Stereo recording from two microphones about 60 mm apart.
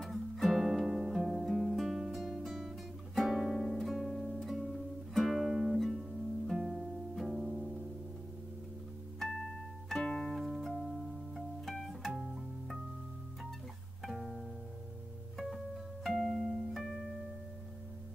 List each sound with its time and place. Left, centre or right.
0.1 s music: centre
6.6 s music: centre
9.8 s music: centre
12.1 s music: centre
12.4 s music: centre
14.0 s music: centre